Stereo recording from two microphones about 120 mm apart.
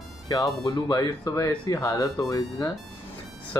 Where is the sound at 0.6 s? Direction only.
35° left (ahead or behind).